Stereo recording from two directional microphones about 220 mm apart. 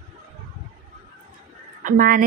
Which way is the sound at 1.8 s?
40° right (ahead or behind).